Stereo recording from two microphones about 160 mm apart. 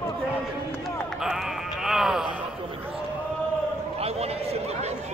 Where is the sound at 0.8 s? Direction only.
Centre (ahead or behind).